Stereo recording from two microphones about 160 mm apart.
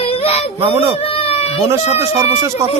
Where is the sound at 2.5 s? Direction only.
20° right (ahead or behind).